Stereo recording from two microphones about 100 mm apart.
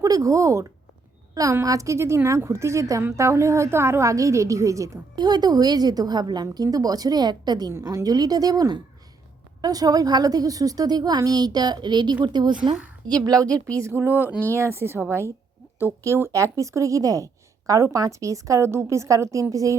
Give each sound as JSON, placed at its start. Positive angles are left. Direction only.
{"t": 0.0, "sound": "a woman's voice", "side_deg": -35}
{"t": 5.1, "sound": "a woman's voice", "side_deg": -45}